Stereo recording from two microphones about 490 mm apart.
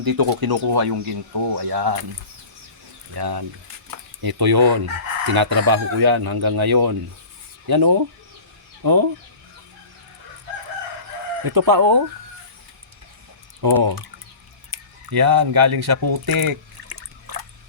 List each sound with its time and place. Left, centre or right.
0.0 s speech: right
3.2 s speech: right
11.4 s speech: right
13.6 s speech: right
14.7 s a sound: right